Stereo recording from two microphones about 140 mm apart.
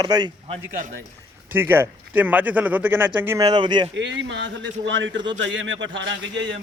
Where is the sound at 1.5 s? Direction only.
15° right (ahead or behind); by 3.8 s 30° right (ahead or behind).